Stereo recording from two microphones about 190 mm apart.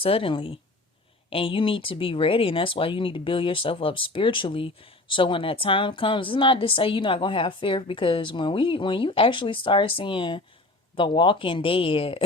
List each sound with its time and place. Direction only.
0.0 s speech: 30° left (ahead or behind)